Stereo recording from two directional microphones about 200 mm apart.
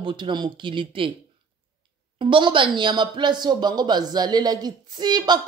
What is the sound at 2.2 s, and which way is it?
A man's voice, 25° right (ahead or behind).